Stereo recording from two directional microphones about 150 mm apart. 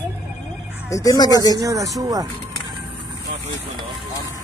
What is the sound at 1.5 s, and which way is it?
Speech, 20° right (ahead or behind).